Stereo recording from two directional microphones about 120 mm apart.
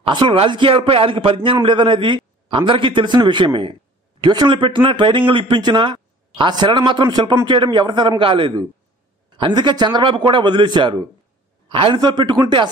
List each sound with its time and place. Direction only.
0.0 s a man's voice: 45° right (ahead or behind)